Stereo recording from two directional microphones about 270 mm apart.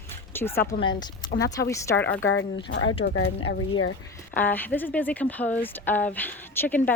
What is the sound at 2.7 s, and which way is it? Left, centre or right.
Speech, left.